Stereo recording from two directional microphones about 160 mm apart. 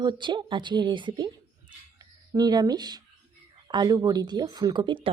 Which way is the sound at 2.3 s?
25° right (ahead or behind).